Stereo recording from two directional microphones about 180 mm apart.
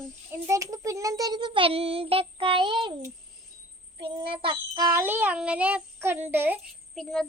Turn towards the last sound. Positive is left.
turn(degrees=5)  # may be behind; listen again after turning